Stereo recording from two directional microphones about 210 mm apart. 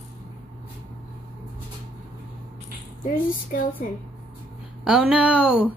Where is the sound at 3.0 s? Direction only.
40° left (ahead or behind).